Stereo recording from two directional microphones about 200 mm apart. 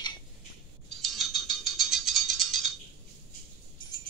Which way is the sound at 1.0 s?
Centre (ahead or behind).